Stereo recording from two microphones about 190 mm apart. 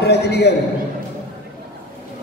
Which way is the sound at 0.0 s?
60° left (ahead or behind).